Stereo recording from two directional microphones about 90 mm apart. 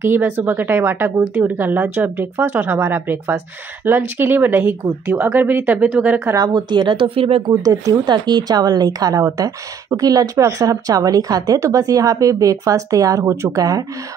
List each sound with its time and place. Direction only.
0.0 s speech: 25° right (ahead or behind)
6.3 s speech: 50° right (ahead or behind); by 7.4 s 90° right
7.4 s a woman's voice: 45° right (ahead or behind)